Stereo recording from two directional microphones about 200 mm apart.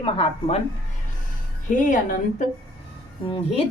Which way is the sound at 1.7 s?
40° left (ahead or behind).